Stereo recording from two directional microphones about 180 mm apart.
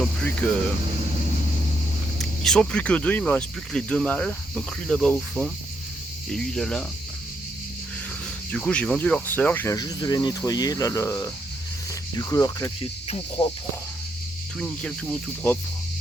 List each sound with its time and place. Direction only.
0.0 s speech: 5° left (ahead or behind)
2.1 s speech: centre (ahead or behind)
8.5 s speech: 5° left (ahead or behind)
14.6 s speech: 5° left (ahead or behind)